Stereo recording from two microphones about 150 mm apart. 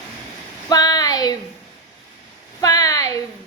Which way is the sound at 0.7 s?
25° left (ahead or behind).